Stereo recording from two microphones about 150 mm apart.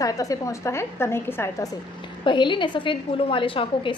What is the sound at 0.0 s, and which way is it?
A woman's voice, 20° left (ahead or behind).